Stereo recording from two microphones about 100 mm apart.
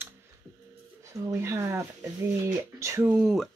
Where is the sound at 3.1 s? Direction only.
5° right (ahead or behind).